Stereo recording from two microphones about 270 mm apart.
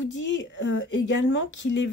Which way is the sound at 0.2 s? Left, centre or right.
Left.